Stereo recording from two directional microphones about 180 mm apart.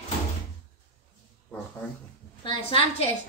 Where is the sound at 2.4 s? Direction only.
30° left (ahead or behind).